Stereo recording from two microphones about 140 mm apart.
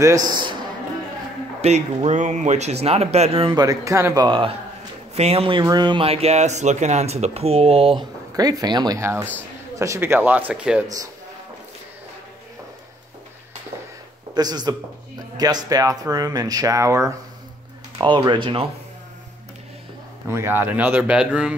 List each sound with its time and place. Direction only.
0.0 s speech: 25° right (ahead or behind)
1.6 s speech: 50° right (ahead or behind)
3.5 s speech: 25° right (ahead or behind); by 5.6 s 45° right (ahead or behind)
5.6 s speech: 30° right (ahead or behind)
6.0 s speech: 45° right (ahead or behind); by 10.9 s 5° right (ahead or behind)
14.3 s speech: 30° right (ahead or behind)
17.9 s speech: 35° right (ahead or behind)
20.2 s speech: 15° right (ahead or behind)